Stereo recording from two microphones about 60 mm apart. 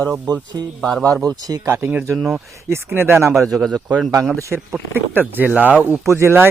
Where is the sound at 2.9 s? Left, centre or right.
Right.